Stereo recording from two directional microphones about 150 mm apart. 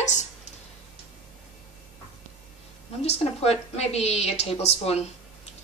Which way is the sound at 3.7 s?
45° left (ahead or behind).